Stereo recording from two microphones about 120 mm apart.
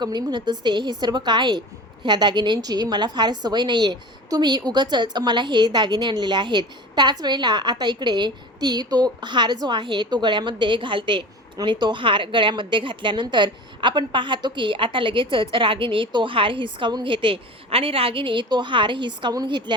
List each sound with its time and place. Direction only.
0.0 s a woman's voice: 35° right (ahead or behind)